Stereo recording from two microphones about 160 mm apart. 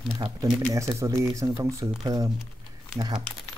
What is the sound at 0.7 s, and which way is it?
Speech, 20° right (ahead or behind).